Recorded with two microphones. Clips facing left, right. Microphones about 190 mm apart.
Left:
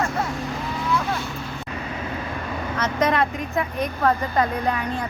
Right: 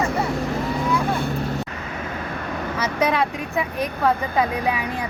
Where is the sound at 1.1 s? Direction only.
55° right (ahead or behind).